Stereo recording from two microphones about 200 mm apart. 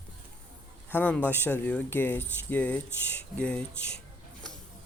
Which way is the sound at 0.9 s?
10° left (ahead or behind).